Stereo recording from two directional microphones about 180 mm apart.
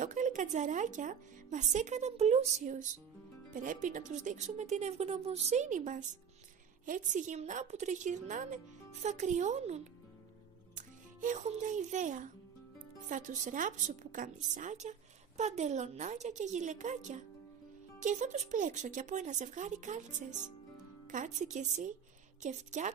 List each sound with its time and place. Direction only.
0.0 s a woman's voice: 45° right (ahead or behind)